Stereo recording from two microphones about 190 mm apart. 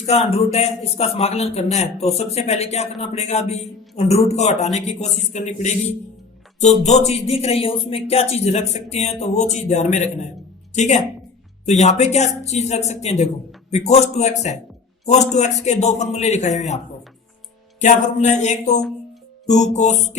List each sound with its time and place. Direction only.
0.0 s a man's voice: 30° left (ahead or behind)